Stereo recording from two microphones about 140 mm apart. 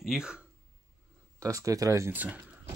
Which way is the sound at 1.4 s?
25° right (ahead or behind).